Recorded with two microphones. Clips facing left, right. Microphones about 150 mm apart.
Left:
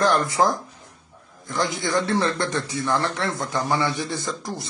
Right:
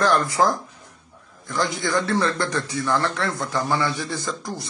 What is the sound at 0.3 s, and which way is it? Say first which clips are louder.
A man's voice: even; 20° left (ahead or behind).